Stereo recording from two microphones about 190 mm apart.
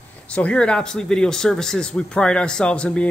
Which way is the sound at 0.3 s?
5° left (ahead or behind).